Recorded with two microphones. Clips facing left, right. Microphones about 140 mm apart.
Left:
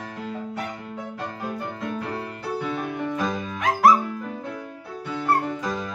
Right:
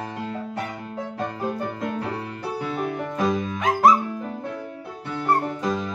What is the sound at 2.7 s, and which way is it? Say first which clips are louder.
Music: right 1 dB; 40° right (ahead or behind).